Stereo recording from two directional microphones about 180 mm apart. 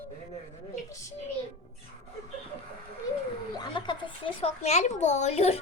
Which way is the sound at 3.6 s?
25° left (ahead or behind).